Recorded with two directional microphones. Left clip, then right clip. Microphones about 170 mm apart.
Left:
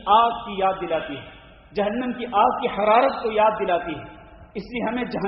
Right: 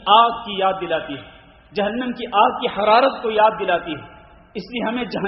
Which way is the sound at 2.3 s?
30° right (ahead or behind).